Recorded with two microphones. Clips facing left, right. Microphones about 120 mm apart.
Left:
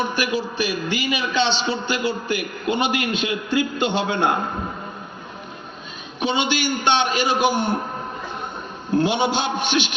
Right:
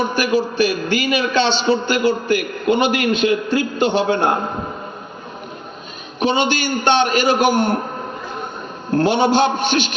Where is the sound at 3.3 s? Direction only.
15° left (ahead or behind).